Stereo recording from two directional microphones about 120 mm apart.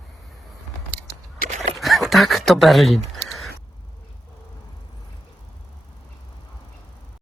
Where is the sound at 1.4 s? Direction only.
85° right.